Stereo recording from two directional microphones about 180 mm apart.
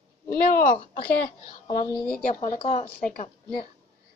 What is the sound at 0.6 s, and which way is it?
Speech, 50° left (ahead or behind).